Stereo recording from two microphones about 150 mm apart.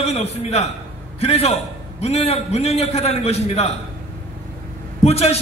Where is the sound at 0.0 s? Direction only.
45° left (ahead or behind).